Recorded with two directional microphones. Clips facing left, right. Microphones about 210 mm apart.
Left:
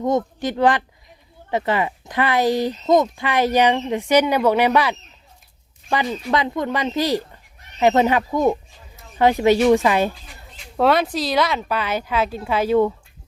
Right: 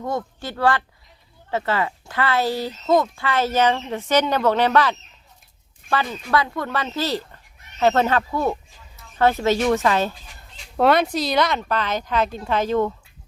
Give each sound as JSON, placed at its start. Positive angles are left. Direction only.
{"t": 0.0, "sound": "speech", "side_deg": 20}
{"t": 10.8, "sound": "speech", "side_deg": 0}